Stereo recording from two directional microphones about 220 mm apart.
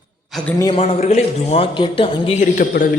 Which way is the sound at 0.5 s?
20° left (ahead or behind).